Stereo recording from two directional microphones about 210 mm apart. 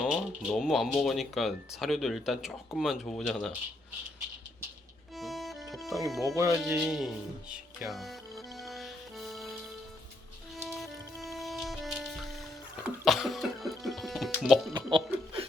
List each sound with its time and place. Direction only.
0.0 s speech: 5° right (ahead or behind)
5.1 s music: centre (ahead or behind)
6.1 s speech: centre (ahead or behind)
6.3 s speech: 15° right (ahead or behind)
6.6 s speech: centre (ahead or behind)
7.5 s music: centre (ahead or behind)
10.7 s music: centre (ahead or behind)
14.7 s music: 20° right (ahead or behind)